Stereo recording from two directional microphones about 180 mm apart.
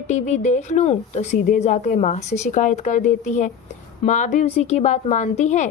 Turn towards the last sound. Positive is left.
turn(degrees=40)  # may be behind; listen again after turning